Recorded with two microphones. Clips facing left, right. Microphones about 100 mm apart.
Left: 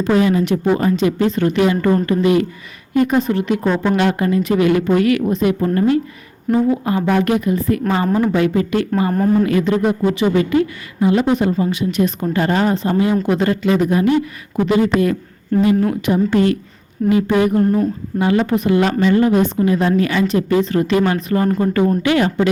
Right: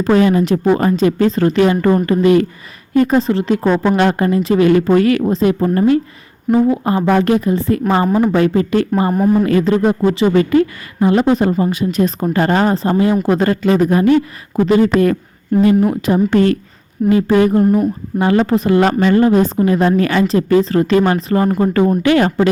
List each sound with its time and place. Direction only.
0.0 s a woman's voice: 40° right (ahead or behind)
6.5 s a woman's voice: 5° right (ahead or behind)
6.8 s a woman's voice: 35° right (ahead or behind)
8.2 s a woman's voice: 40° right (ahead or behind)
10.3 s a woman's voice: 45° right (ahead or behind)
15.5 s speech: 10° right (ahead or behind)
16.0 s a woman's voice: 35° right (ahead or behind)
16.3 s a woman's voice: 45° right (ahead or behind)
17.1 s a woman's voice: 35° right (ahead or behind)
17.6 s speech: 10° right (ahead or behind)
18.2 s a woman's voice: 40° right (ahead or behind)
19.2 s a woman's voice: 35° right (ahead or behind)
20.2 s a woman's voice: 35° right (ahead or behind)
22.0 s a woman's voice: 45° right (ahead or behind)